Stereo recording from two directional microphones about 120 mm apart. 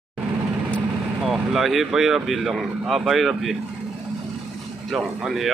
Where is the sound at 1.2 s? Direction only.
Centre (ahead or behind).